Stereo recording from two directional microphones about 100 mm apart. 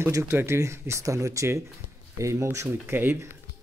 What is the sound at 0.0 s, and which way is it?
Speech, 25° right (ahead or behind).